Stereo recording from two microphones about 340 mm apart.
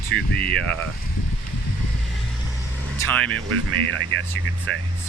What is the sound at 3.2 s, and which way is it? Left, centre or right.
Speech, right.